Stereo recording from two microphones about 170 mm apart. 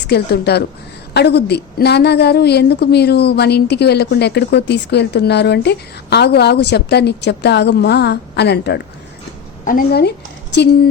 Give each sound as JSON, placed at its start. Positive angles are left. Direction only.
{"t": 0.1, "sound": "a woman's voice", "side_deg": 70}
{"t": 9.6, "sound": "speech", "side_deg": 60}